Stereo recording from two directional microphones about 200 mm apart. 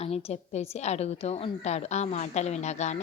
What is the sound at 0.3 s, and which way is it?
A woman's voice, 30° left (ahead or behind).